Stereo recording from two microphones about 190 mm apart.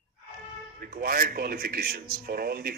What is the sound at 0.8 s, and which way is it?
A man's voice, 50° right (ahead or behind).